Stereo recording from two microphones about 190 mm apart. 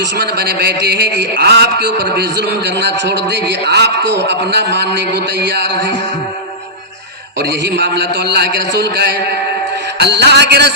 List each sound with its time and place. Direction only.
0.0 s a man's voice: 60° right (ahead or behind)
7.3 s a man's voice: 65° right (ahead or behind)